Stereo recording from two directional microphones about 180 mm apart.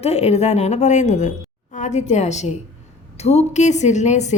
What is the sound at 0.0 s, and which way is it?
A woman's voice, 35° left (ahead or behind).